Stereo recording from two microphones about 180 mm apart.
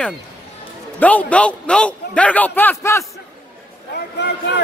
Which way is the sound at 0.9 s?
10° left (ahead or behind).